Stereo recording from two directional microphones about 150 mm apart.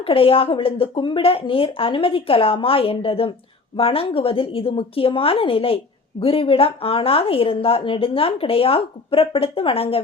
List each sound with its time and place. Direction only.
0.0 s speech: 40° left (ahead or behind)